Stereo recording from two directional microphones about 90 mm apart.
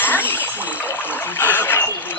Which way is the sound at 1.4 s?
25° left (ahead or behind).